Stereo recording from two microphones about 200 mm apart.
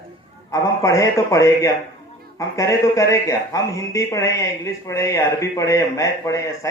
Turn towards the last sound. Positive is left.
turn(degrees=15)  # may be behind; listen again after turning